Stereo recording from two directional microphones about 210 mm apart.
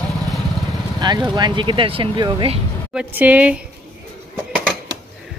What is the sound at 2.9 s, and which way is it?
Speech, 5° right (ahead or behind).